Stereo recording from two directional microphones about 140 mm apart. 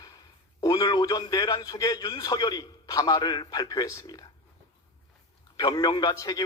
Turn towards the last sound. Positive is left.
turn(degrees=30)  # may be behind; listen again after turning